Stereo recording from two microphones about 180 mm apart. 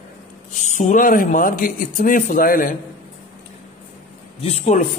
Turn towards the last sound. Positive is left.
turn(degrees=35)  # may be behind; listen again after turning